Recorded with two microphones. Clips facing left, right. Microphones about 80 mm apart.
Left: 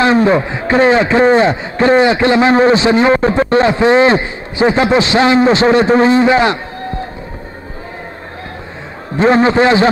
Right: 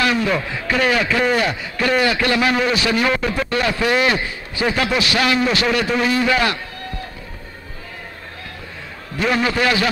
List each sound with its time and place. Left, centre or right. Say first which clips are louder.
0.0 s a man's voice: left 8 dB; left
9.1 s a man's voice: left 9 dB; left